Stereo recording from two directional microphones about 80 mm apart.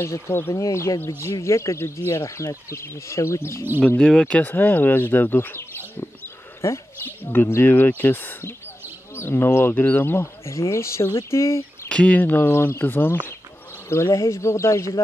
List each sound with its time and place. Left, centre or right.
0.0 s speech: left
4.0 s speech: centre; by 11.9 s left
11.9 s speech: centre; by 14.9 s left